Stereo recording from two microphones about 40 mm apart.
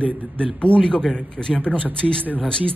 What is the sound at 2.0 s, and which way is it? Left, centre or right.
Speech, left.